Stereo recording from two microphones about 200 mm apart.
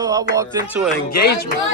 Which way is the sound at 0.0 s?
15° right (ahead or behind).